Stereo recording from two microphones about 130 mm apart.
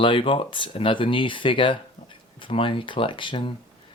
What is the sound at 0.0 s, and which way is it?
Speech, 40° left (ahead or behind).